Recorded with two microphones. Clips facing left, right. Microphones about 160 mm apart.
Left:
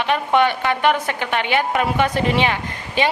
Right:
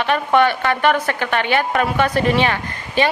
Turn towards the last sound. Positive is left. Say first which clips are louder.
# right 2 dB
turn(degrees=15)  # may be behind; listen again after turning